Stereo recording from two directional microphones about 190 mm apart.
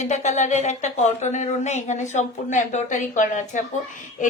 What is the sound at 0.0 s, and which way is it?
A woman's voice, 40° left (ahead or behind).